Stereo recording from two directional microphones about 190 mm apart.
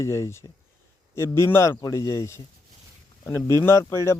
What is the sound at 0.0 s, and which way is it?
A man's voice, 15° left (ahead or behind).